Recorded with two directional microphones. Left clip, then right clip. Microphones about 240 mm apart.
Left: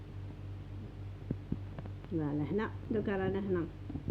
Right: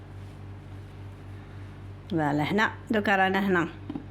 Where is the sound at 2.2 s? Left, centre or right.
Right.